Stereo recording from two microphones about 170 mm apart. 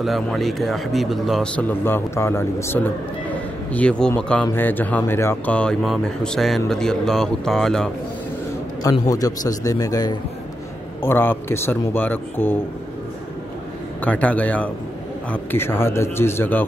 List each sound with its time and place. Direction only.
0.0 s speech: centre (ahead or behind)
9.0 s speech: 20° left (ahead or behind)
14.0 s speech: 10° left (ahead or behind)